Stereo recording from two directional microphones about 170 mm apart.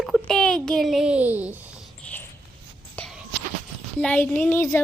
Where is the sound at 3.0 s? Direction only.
Centre (ahead or behind).